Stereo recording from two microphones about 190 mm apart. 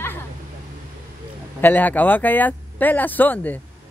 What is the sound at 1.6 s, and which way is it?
Speech, 10° left (ahead or behind).